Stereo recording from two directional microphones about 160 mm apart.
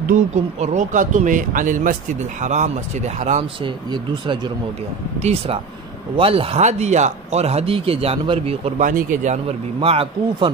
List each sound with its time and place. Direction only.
0.1 s speech: 45° right (ahead or behind)
3.6 s speech: 30° right (ahead or behind)
8.7 s speech: 55° right (ahead or behind)
9.8 s speech: 35° right (ahead or behind)